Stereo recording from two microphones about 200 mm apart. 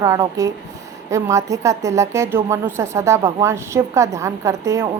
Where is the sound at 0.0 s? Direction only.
15° right (ahead or behind).